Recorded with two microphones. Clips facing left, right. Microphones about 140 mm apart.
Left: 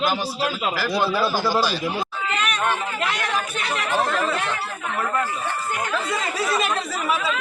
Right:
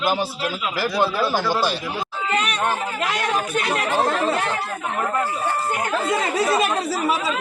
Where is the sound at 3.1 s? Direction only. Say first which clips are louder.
Right 3 dB; 50° right (ahead or behind).